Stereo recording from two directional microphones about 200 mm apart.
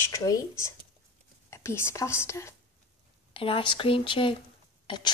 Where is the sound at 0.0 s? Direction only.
15° left (ahead or behind).